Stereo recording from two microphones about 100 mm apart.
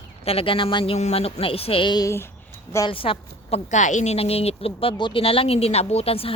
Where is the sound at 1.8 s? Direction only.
45° left (ahead or behind).